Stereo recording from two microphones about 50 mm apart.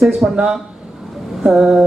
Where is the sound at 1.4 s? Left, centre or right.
Centre.